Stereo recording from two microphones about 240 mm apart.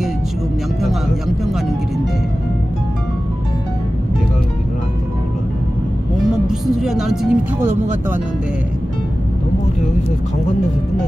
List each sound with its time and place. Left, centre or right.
6.3 s speech: centre